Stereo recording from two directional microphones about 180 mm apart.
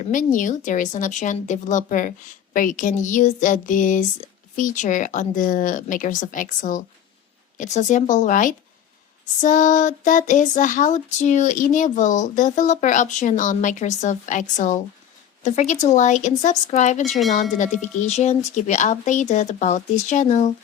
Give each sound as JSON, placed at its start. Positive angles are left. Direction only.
{"t": 0.0, "sound": "a sound", "side_deg": 45}
{"t": 15.4, "sound": "speech", "side_deg": 40}
{"t": 17.1, "sound": "speech", "side_deg": 0}
{"t": 18.0, "sound": "speech", "side_deg": 40}